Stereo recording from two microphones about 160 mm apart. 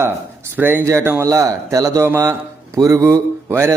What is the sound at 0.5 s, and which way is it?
A man's voice, 10° right (ahead or behind).